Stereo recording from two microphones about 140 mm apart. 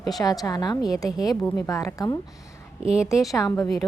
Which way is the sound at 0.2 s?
25° left (ahead or behind).